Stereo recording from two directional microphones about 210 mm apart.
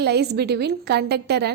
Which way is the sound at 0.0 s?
50° right (ahead or behind).